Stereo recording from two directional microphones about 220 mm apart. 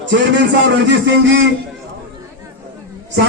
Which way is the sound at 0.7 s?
50° right (ahead or behind).